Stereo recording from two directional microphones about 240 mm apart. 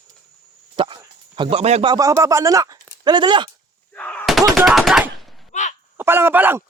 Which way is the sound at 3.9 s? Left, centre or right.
Centre.